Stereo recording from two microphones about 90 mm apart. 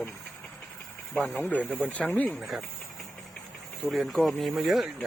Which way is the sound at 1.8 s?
15° left (ahead or behind).